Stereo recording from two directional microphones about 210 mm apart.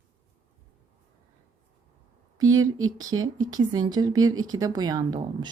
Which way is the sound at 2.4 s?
15° right (ahead or behind).